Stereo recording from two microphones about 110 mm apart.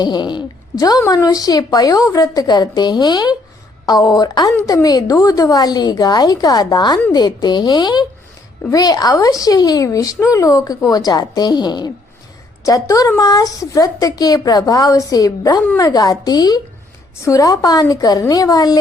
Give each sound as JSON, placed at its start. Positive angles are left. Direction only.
{"t": 0.0, "sound": "speech", "side_deg": 40}